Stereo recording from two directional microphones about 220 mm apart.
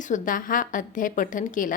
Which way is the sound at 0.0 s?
35° left (ahead or behind).